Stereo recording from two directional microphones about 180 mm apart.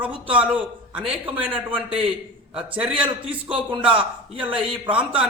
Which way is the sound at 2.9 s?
10° right (ahead or behind).